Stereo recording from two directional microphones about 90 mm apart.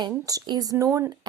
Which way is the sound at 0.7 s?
35° right (ahead or behind).